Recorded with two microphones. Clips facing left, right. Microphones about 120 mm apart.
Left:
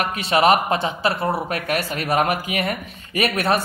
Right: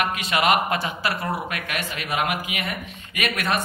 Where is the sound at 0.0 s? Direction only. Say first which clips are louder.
Left 4 dB; 30° left (ahead or behind).